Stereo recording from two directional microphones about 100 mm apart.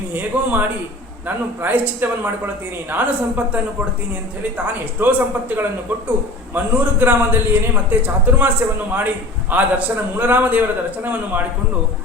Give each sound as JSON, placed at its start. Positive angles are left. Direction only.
{"t": 0.1, "sound": "a man's voice", "side_deg": -20}